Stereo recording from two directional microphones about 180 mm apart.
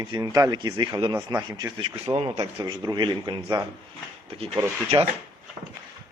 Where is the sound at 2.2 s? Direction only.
35° right (ahead or behind).